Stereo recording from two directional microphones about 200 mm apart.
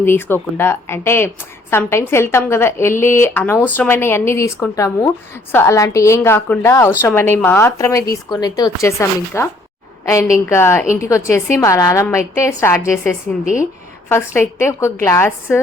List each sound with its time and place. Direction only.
0.0 s a woman's voice: 10° left (ahead or behind)
13.4 s speech: 40° left (ahead or behind)
14.1 s a woman's voice: 10° left (ahead or behind)